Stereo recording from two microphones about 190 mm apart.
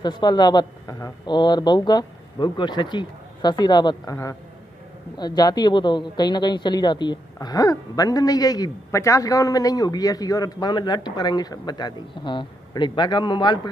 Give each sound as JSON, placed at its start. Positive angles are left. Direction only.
{"t": 0.0, "sound": "speech", "side_deg": 20}